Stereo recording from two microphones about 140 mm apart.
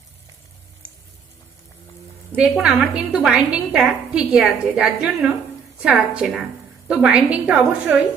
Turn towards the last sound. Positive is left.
turn(degrees=-10)  # may be behind; listen again after turning